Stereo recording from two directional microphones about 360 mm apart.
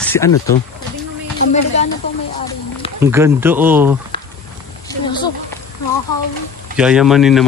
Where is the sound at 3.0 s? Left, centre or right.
Centre.